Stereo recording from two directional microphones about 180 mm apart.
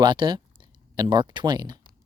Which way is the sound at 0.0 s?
25° right (ahead or behind).